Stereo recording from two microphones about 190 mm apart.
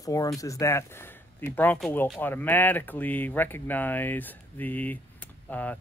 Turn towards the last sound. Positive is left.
turn(degrees=10)  # may be behind; listen again after turning